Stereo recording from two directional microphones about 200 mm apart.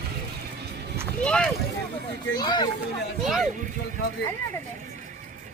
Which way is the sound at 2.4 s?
20° left (ahead or behind).